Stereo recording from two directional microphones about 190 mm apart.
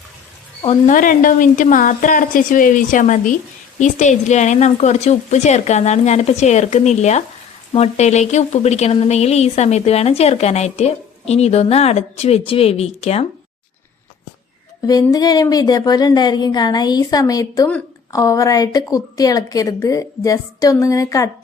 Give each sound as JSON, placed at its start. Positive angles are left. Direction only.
{"t": 0.9, "sound": "a woman's voice", "side_deg": 45}
{"t": 14.8, "sound": "speech", "side_deg": 20}